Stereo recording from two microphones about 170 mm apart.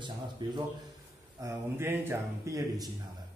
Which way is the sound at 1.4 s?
15° right (ahead or behind).